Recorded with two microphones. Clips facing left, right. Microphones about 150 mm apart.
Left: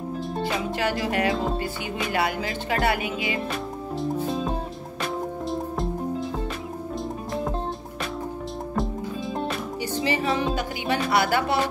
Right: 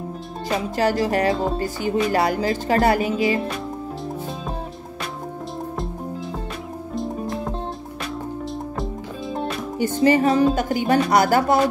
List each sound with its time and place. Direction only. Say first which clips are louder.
0.7 s music: right 7 dB; 40° right (ahead or behind)
9.8 s speech: right 10 dB; 50° right (ahead or behind)